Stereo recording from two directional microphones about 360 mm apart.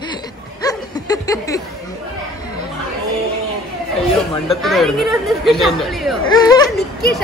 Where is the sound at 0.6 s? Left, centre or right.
Centre.